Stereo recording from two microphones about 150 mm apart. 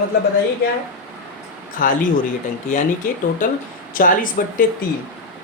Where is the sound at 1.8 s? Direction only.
65° left (ahead or behind).